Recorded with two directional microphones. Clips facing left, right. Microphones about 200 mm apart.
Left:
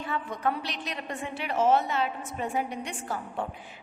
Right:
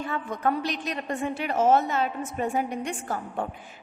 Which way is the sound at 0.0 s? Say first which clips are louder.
Right 2 dB; 45° right (ahead or behind).